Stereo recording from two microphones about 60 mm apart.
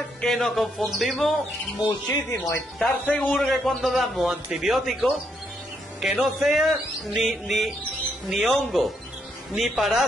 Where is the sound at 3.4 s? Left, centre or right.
Centre.